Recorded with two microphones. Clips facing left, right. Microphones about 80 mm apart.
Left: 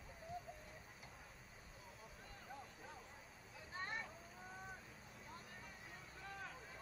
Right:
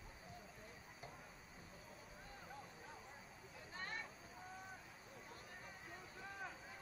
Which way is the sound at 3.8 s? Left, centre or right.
Centre.